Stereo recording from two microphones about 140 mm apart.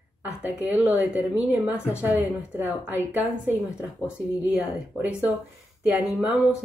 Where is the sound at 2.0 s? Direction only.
15° right (ahead or behind).